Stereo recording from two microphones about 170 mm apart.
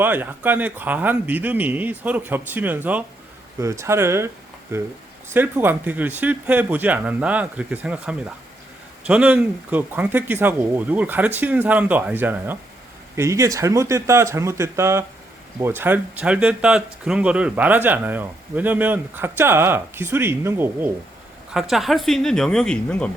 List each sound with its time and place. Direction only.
0.0 s speech: 10° right (ahead or behind)
5.3 s speech: 10° right (ahead or behind)
21.5 s speech: centre (ahead or behind)